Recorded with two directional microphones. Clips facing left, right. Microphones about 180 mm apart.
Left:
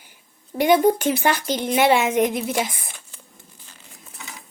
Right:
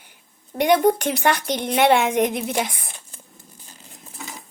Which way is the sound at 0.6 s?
5° left (ahead or behind).